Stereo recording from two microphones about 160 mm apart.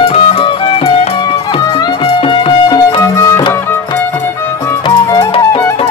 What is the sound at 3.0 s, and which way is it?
Music, 20° left (ahead or behind).